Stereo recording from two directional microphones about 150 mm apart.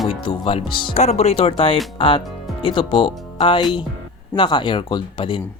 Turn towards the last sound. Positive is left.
turn(degrees=35)  # may be behind; listen again after turning